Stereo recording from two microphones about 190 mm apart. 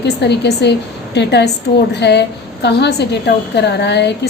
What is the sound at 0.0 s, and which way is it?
A woman's voice, 60° left (ahead or behind).